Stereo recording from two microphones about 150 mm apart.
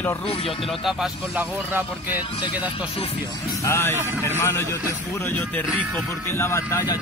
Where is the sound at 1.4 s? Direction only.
10° right (ahead or behind).